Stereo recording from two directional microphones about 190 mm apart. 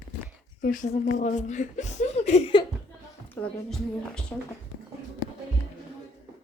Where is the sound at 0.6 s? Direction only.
45° left (ahead or behind).